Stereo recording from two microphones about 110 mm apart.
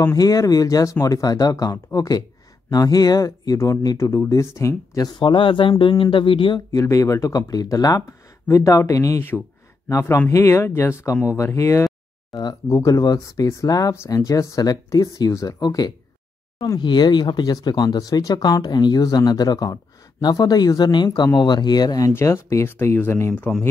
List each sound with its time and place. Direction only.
0.0 s speech: 35° left (ahead or behind)
5.2 s speech: 50° left (ahead or behind)
6.8 s speech: 30° left (ahead or behind)
22.1 s speech: 25° left (ahead or behind)